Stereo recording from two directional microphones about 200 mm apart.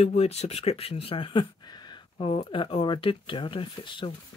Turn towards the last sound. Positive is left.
turn(degrees=25)  # may be behind; listen again after turning